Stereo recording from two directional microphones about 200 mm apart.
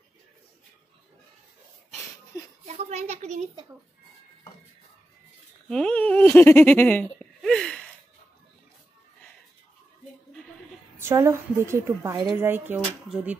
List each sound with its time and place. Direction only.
2.6 s a sound: 35° right (ahead or behind)
5.7 s giggle: 5° left (ahead or behind)
11.0 s a woman's voice: 15° right (ahead or behind)